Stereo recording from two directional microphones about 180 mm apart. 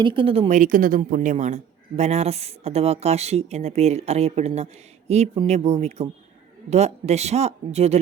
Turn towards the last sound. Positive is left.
turn(degrees=-35)  # may be behind; listen again after turning